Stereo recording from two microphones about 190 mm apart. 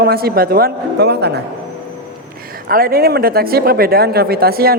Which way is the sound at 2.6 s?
50° right (ahead or behind).